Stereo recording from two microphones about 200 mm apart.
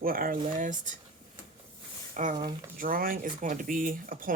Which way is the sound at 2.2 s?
35° right (ahead or behind).